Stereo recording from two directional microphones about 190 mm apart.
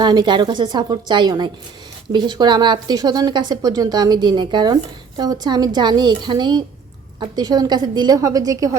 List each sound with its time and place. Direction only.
0.0 s speech: 20° right (ahead or behind)